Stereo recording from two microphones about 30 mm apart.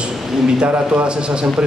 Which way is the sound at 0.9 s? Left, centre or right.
Right.